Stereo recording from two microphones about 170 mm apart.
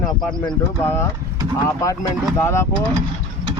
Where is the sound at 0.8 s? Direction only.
15° left (ahead or behind).